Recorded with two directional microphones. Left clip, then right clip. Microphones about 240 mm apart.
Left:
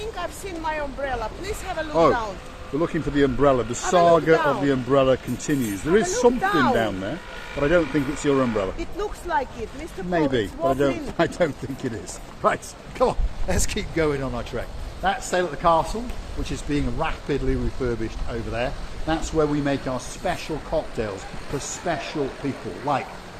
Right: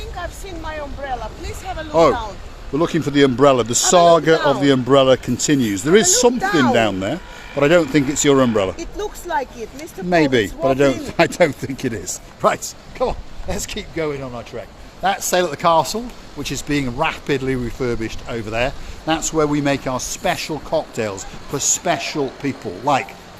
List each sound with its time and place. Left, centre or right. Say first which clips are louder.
0.2 s speech: even; centre
2.7 s speech: right 6 dB; right
12.4 s a man's voice: right 5 dB; right
13.0 s speech: even; centre
15.0 s a man's voice: right 5 dB; right